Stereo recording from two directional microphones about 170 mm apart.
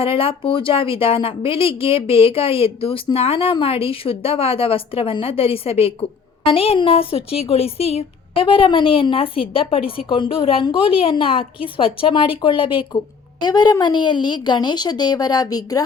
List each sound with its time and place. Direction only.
0.0 s a woman's voice: 30° left (ahead or behind)